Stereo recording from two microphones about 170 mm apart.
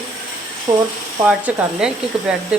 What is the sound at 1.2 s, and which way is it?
Speech, 10° right (ahead or behind).